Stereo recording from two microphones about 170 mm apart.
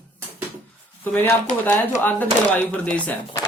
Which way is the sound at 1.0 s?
10° left (ahead or behind).